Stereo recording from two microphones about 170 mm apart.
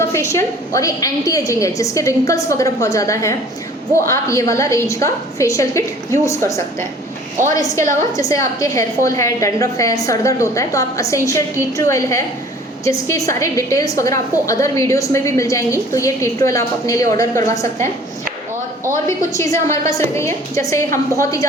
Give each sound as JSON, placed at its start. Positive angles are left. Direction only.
{"t": 0.0, "sound": "a woman's voice", "side_deg": 15}
{"t": 7.4, "sound": "a woman's voice", "side_deg": -50}
{"t": 8.1, "sound": "a woman's voice", "side_deg": 20}
{"t": 19.0, "sound": "a woman's voice", "side_deg": 15}